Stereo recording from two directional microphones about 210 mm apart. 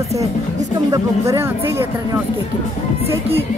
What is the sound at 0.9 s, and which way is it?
Speech, 15° right (ahead or behind).